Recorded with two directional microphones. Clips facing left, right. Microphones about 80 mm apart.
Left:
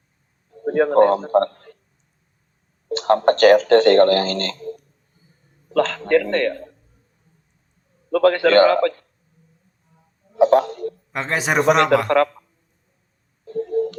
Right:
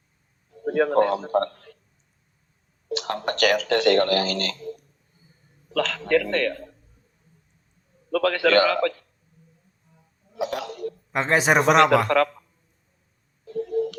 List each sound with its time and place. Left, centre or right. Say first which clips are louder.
0.6 s a man's voice: left 5 dB; left
2.9 s speech: left 11 dB; left
8.1 s speech: left 5 dB; left
10.3 s a sound: left 14 dB; left
11.1 s a man's voice: right 2 dB; centre
11.6 s a man's voice: left 3 dB; left
12.0 s speech: left 3 dB; left
13.5 s a sound: left 3 dB; left